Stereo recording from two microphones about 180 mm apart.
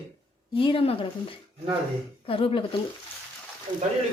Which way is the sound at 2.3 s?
30° left (ahead or behind).